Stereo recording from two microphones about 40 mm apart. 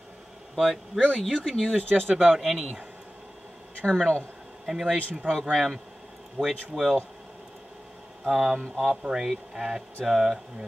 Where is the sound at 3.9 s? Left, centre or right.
Centre.